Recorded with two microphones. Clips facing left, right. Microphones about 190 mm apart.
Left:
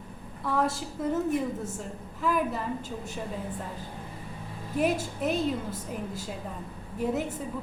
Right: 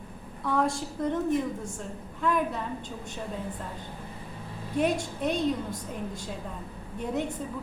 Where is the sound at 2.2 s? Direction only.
5° left (ahead or behind).